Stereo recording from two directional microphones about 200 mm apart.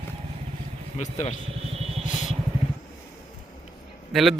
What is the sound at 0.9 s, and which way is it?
Speech, 35° left (ahead or behind).